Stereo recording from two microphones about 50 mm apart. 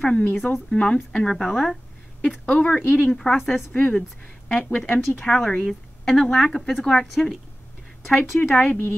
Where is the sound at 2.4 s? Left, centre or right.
Left.